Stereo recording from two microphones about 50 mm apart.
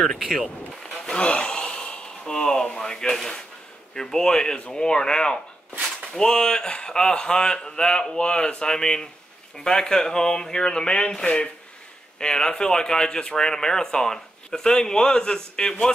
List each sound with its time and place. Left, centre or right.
0.0 s speech: centre
1.0 s gasp: centre
3.9 s speech: centre